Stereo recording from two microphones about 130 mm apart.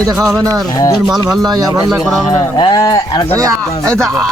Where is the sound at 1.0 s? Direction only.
30° right (ahead or behind).